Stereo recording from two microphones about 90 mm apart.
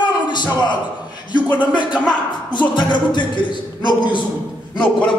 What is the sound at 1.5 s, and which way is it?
Speech, 60° left (ahead or behind).